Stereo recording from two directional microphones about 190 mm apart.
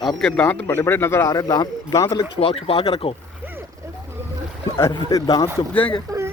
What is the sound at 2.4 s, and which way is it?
Speech, 30° left (ahead or behind).